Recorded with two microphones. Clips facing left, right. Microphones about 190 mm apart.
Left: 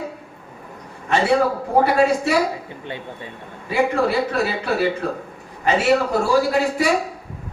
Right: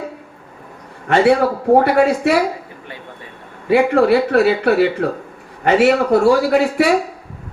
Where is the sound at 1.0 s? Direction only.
60° right (ahead or behind).